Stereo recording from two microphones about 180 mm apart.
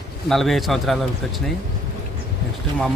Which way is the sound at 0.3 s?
Centre (ahead or behind).